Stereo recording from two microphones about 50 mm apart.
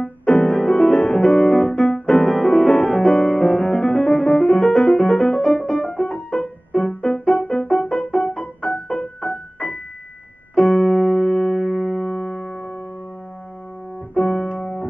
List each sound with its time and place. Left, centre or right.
0.0 s music: centre
8.1 s piano: centre
10.5 s music: centre
14.2 s keyboard: centre
14.6 s music: centre